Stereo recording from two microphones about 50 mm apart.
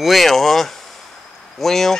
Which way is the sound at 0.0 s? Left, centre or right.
Centre.